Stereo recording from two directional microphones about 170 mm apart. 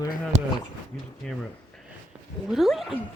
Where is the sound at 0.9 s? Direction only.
5° left (ahead or behind).